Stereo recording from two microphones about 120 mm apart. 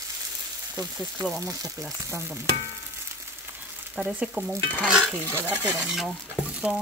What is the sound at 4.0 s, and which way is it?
Frying, 10° right (ahead or behind).